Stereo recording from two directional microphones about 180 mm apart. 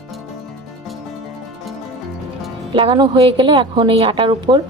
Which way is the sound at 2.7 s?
30° right (ahead or behind).